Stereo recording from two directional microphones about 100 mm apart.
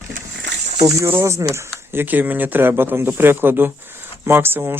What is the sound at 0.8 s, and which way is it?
Speech, 35° right (ahead or behind).